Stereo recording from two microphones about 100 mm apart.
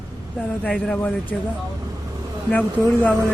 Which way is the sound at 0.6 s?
10° left (ahead or behind).